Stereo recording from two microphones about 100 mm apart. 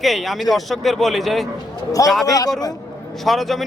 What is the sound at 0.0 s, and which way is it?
Speech, centre (ahead or behind).